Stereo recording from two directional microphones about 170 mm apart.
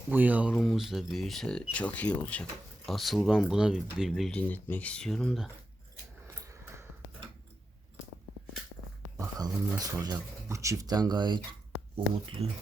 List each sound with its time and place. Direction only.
0.1 s speech: 10° right (ahead or behind)
6.2 s a sound: 15° right (ahead or behind)
9.1 s speech: 20° right (ahead or behind)